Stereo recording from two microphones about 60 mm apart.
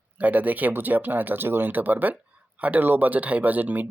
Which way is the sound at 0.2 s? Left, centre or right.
Right.